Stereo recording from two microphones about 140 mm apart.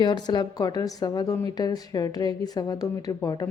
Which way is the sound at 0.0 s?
30° left (ahead or behind).